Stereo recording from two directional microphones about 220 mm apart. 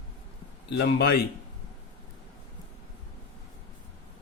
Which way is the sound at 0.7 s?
45° left (ahead or behind).